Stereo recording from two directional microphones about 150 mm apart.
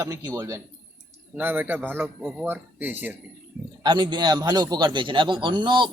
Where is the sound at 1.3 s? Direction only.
10° right (ahead or behind).